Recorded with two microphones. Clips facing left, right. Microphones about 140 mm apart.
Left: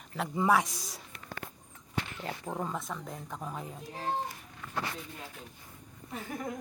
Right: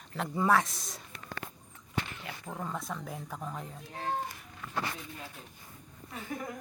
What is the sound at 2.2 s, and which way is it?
Speech, 25° left (ahead or behind).